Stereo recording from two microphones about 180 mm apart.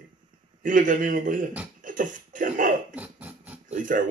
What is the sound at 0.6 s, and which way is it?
Speech, 45° right (ahead or behind).